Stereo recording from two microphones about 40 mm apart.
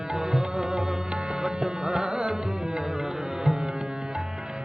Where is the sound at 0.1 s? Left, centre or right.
Centre.